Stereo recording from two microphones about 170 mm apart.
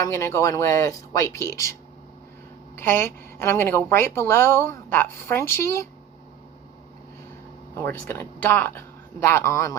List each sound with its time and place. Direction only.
0.1 s speech: 15° left (ahead or behind)
2.7 s speech: 15° left (ahead or behind)
7.8 s speech: 15° left (ahead or behind)